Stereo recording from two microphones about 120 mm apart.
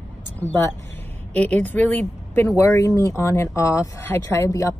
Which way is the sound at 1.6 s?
15° left (ahead or behind).